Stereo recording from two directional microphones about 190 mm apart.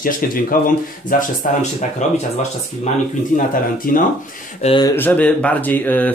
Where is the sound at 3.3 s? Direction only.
45° left (ahead or behind).